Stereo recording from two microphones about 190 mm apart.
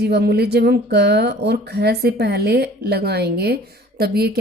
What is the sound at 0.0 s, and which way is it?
Speech, 60° right (ahead or behind).